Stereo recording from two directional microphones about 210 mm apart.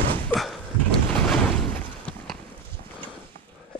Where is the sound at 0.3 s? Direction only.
Centre (ahead or behind).